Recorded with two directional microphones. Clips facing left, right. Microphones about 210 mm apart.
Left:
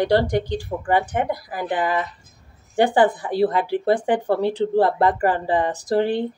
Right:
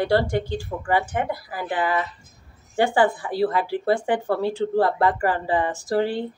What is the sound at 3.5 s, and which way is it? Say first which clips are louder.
Speech: left 2 dB; 20° left (ahead or behind).